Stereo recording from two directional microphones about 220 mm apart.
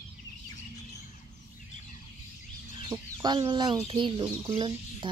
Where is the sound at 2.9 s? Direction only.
20° right (ahead or behind).